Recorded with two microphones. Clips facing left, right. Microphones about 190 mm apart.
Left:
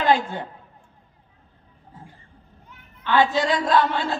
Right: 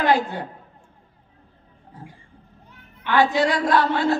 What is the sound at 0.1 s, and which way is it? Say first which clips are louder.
Speech: even; 20° left (ahead or behind).